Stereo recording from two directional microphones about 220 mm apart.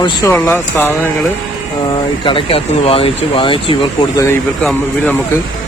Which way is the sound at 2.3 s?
25° left (ahead or behind).